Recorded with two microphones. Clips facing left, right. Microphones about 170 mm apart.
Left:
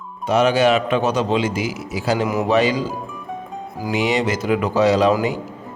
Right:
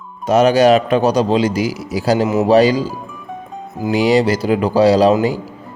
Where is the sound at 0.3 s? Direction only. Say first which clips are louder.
Right 5 dB; 40° right (ahead or behind).